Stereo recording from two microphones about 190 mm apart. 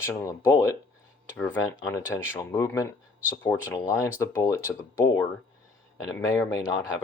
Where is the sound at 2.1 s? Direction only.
15° left (ahead or behind).